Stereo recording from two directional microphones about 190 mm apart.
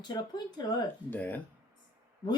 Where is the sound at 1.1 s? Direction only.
10° left (ahead or behind).